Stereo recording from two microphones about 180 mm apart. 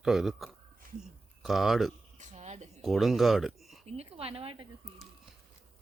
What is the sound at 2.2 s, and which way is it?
Speech, 40° right (ahead or behind).